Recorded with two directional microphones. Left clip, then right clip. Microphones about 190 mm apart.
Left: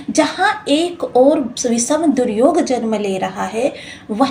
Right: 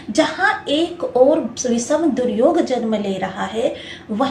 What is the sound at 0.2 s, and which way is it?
A woman's voice, 30° left (ahead or behind).